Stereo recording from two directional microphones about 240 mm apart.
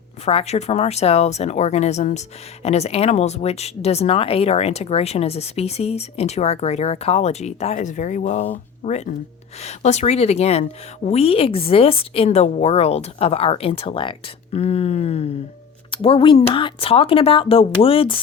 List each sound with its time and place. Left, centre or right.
0.3 s speech: left